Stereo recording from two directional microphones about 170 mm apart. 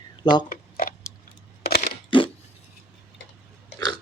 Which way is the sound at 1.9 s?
30° left (ahead or behind).